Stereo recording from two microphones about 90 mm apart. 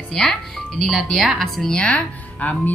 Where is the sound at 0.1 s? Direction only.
5° left (ahead or behind).